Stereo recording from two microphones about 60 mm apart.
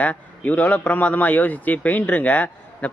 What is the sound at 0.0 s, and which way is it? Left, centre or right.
Speech, left.